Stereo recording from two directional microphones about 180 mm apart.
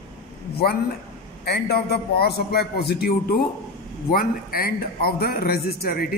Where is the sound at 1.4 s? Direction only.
65° left (ahead or behind).